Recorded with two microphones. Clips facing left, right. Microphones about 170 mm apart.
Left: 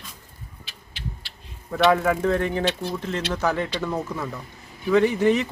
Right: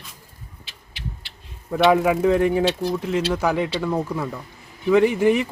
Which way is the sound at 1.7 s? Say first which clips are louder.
Right 2 dB; 15° right (ahead or behind).